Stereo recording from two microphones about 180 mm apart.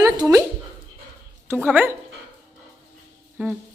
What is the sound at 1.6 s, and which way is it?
Speech, 10° right (ahead or behind).